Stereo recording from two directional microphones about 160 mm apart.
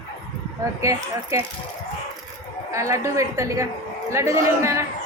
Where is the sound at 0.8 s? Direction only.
20° right (ahead or behind).